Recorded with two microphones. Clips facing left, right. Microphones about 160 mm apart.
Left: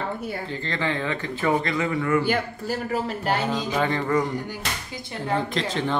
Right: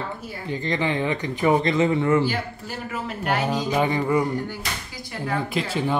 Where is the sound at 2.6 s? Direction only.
40° left (ahead or behind).